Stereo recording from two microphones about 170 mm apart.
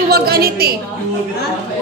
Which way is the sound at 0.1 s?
65° right (ahead or behind).